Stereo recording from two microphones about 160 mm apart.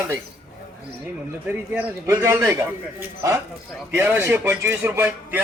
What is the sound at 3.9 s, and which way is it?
A man's voice, 15° right (ahead or behind).